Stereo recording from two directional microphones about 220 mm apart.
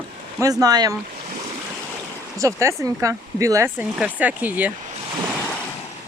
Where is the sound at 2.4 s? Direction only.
15° right (ahead or behind).